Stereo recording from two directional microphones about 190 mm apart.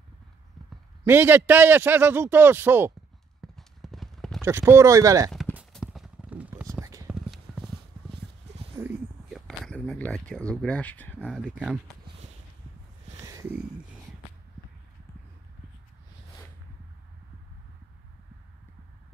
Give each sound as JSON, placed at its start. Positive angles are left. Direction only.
{"t": 1.0, "sound": "a man's voice", "side_deg": -10}
{"t": 3.3, "sound": "clip-clop", "side_deg": 0}
{"t": 4.4, "sound": "a man's voice", "side_deg": -15}
{"t": 5.3, "sound": "clip-clop", "side_deg": -5}
{"t": 6.7, "sound": "clip-clop", "side_deg": -15}
{"t": 7.2, "sound": "clip-clop", "side_deg": 0}
{"t": 8.8, "sound": "a sound", "side_deg": -15}
{"t": 9.3, "sound": "a sound", "side_deg": 5}
{"t": 11.2, "sound": "speech", "side_deg": -5}
{"t": 13.2, "sound": "a sound", "side_deg": -15}